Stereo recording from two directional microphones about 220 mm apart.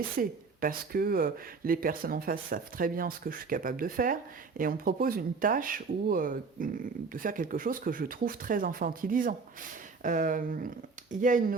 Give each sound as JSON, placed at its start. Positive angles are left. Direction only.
{"t": 0.2, "sound": "speech", "side_deg": -40}